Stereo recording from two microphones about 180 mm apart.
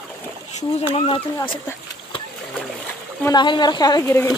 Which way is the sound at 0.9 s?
30° left (ahead or behind).